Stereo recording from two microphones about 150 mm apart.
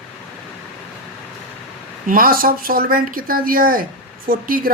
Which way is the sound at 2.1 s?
70° right (ahead or behind).